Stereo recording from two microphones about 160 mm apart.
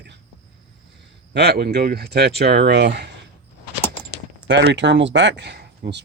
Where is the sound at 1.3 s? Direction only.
85° right.